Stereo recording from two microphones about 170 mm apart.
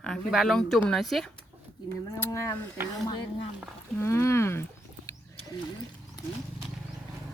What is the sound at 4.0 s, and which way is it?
Speech, 15° left (ahead or behind).